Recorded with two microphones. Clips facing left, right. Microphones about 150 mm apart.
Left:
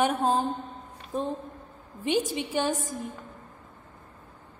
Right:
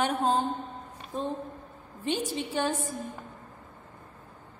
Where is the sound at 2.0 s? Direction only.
15° left (ahead or behind).